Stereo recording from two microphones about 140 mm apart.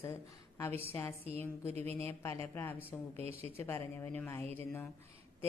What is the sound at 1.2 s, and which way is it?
Speech, 45° right (ahead or behind).